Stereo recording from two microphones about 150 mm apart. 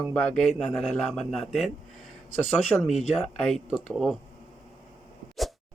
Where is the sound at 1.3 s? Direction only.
Centre (ahead or behind).